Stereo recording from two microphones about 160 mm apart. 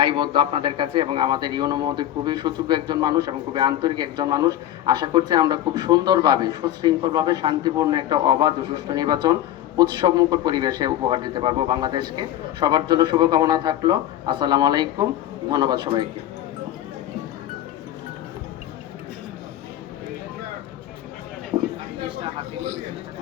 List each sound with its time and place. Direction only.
0.0 s speech: 30° right (ahead or behind)